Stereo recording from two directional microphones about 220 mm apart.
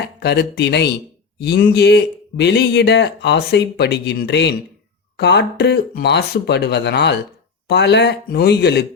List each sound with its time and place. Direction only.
0.2 s speech: 50° left (ahead or behind)